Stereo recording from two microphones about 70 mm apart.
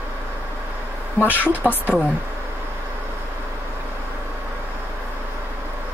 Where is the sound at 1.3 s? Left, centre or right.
Left.